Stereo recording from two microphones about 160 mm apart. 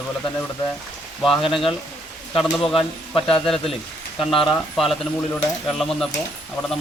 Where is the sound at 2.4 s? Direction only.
Centre (ahead or behind).